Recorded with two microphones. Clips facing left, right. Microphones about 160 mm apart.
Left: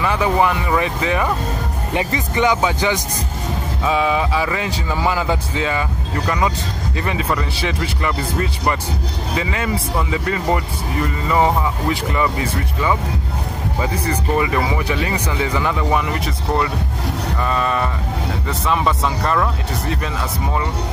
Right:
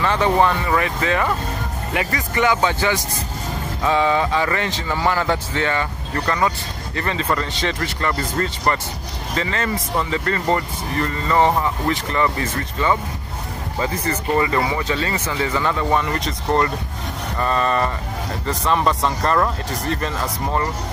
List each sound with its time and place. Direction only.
0.0 s speech: 10° left (ahead or behind)
3.8 s speech: 5° left (ahead or behind)